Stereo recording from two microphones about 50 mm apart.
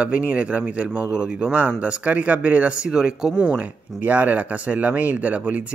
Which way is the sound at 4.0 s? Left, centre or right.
Right.